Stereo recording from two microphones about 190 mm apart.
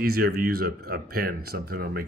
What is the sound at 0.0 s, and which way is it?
Speech, 55° right (ahead or behind).